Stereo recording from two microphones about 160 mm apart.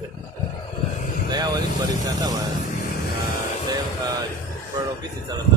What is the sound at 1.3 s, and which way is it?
Vehicle, 25° right (ahead or behind).